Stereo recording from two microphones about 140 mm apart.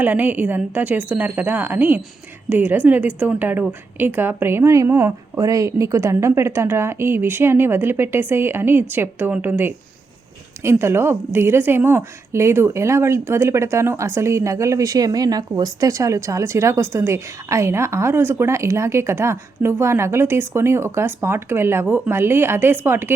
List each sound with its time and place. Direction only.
0.0 s a woman's voice: 15° right (ahead or behind)